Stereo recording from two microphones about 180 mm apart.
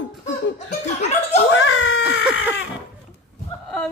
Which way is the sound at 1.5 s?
90° left.